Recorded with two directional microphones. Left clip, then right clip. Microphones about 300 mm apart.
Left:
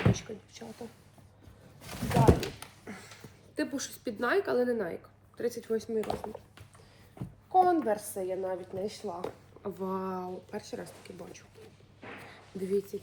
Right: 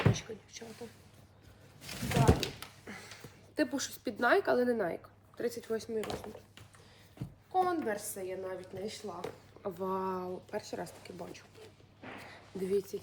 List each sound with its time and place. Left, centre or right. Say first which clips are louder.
0.1 s a sound: left 3 dB; centre
2.8 s a sound: left 1 dB; centre
5.4 s speech: left 3 dB; centre
6.0 s a woman's voice: left 5 dB; centre
7.5 s a woman's voice: left 6 dB; centre
9.6 s speech: even; centre